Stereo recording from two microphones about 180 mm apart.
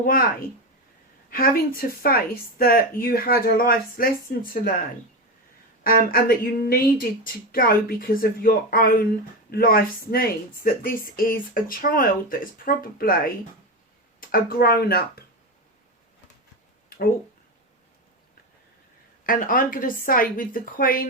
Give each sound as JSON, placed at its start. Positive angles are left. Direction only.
{"t": 0.0, "sound": "speech", "side_deg": 55}
{"t": 5.8, "sound": "speech", "side_deg": 55}
{"t": 19.2, "sound": "speech", "side_deg": 50}